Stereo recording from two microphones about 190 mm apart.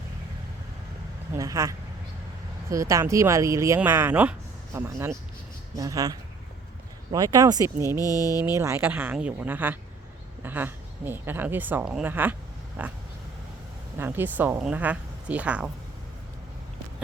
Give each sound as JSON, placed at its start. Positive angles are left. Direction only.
{"t": 1.3, "sound": "speech", "side_deg": -15}
{"t": 7.9, "sound": "a sound", "side_deg": 20}
{"t": 8.5, "sound": "a woman's voice", "side_deg": -15}
{"t": 14.0, "sound": "speech", "side_deg": -10}